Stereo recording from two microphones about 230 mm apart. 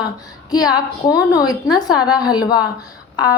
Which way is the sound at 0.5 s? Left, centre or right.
Centre.